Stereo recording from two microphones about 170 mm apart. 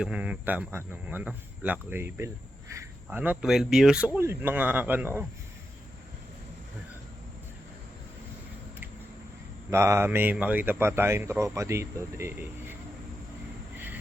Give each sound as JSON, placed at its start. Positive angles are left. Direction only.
{"t": 0.0, "sound": "speech", "side_deg": -5}
{"t": 9.6, "sound": "speech", "side_deg": -15}
{"t": 13.7, "sound": "a sound", "side_deg": -10}